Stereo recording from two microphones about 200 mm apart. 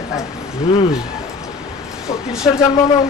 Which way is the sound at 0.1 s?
15° left (ahead or behind).